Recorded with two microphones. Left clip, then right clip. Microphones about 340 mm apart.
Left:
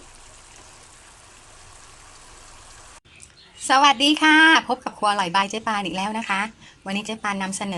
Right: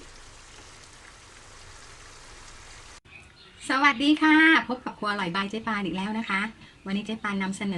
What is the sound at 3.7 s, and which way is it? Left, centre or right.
A woman's voice, centre.